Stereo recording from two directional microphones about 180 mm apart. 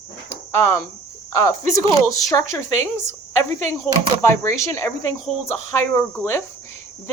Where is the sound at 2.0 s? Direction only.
15° left (ahead or behind).